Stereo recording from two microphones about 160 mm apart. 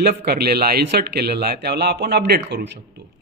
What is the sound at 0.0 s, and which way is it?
A man's voice, 75° right (ahead or behind).